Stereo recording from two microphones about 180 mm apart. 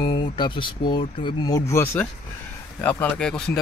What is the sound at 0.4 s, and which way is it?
Speech, 25° left (ahead or behind).